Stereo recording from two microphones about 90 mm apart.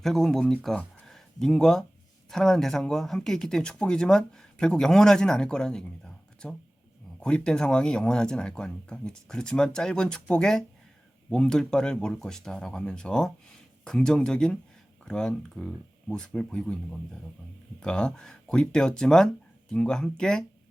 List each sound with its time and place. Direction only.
0.0 s speech: 5° left (ahead or behind)
1.0 s a sound: 5° left (ahead or behind)
2.3 s speech: 5° left (ahead or behind)